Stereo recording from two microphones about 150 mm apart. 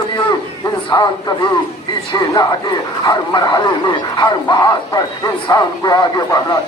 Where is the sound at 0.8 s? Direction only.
30° left (ahead or behind).